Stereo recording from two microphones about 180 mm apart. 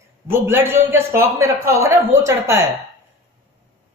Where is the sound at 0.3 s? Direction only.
10° right (ahead or behind).